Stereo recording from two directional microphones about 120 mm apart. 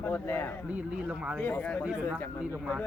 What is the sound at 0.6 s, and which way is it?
Speech, 10° right (ahead or behind).